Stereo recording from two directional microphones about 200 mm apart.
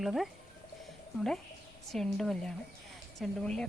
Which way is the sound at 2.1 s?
Centre (ahead or behind).